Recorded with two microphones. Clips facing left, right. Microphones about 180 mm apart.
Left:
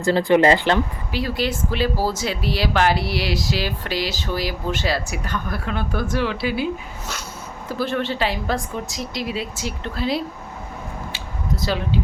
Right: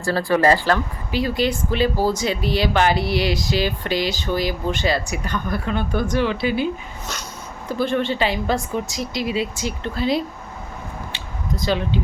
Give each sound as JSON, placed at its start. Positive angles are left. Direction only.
{"t": 0.0, "sound": "speech", "side_deg": 20}
{"t": 1.1, "sound": "speech", "side_deg": 0}
{"t": 7.7, "sound": "speech", "side_deg": 5}
{"t": 11.1, "sound": "a sound", "side_deg": 5}